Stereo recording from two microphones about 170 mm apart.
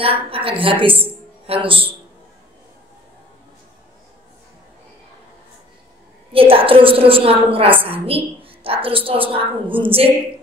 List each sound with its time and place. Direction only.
0.0 s a woman's voice: 35° right (ahead or behind)
6.3 s a woman's voice: 35° right (ahead or behind)